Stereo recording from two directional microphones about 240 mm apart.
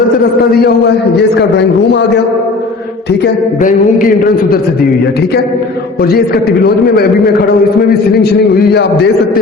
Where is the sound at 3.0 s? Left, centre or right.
Left.